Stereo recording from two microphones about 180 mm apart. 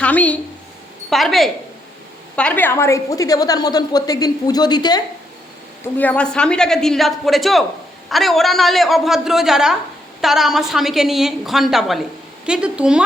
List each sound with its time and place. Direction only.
0.0 s a woman's voice: 10° left (ahead or behind)
5.8 s a woman's voice: 10° left (ahead or behind)